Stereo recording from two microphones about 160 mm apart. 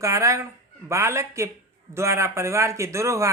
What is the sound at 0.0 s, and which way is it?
Speech, 20° right (ahead or behind).